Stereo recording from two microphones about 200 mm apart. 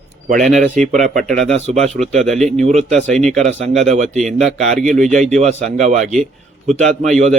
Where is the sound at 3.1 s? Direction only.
Centre (ahead or behind).